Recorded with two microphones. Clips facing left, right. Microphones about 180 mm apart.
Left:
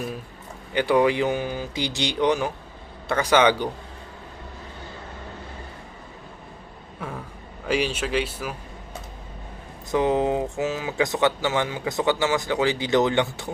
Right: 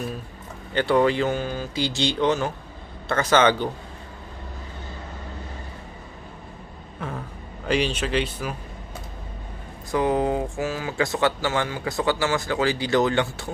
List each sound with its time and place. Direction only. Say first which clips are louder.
0.7 s speech: even; 15° left (ahead or behind)
7.0 s a sound: right 1 dB; 10° left (ahead or behind)
7.7 s speech: right 1 dB; 10° left (ahead or behind)
9.9 s speech: left 1 dB; 20° left (ahead or behind)